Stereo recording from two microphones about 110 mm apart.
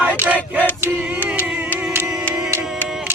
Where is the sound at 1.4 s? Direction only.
15° right (ahead or behind).